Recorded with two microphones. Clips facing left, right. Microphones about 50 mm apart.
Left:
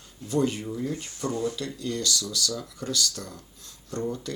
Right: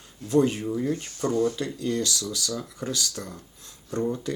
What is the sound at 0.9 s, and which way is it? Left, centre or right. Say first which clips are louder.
Speech: right 4 dB; right.